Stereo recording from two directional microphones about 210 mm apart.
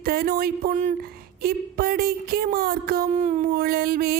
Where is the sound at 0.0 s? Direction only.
45° right (ahead or behind).